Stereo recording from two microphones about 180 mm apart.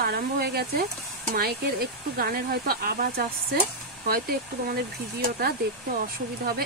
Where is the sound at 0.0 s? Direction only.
60° right (ahead or behind).